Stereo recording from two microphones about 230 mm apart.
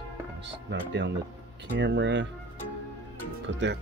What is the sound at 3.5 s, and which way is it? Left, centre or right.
Speech, right.